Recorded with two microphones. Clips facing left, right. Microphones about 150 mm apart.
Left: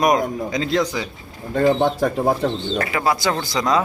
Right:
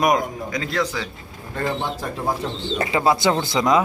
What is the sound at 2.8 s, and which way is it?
Speech, 25° right (ahead or behind).